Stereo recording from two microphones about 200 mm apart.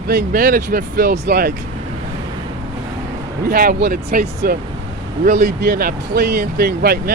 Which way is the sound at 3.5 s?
50° right (ahead or behind).